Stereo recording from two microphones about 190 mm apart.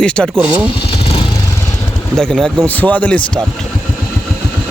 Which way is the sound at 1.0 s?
25° left (ahead or behind).